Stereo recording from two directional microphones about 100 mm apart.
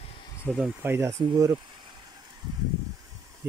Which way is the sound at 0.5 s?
10° left (ahead or behind).